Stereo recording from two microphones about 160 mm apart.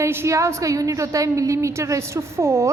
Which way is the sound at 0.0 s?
15° right (ahead or behind).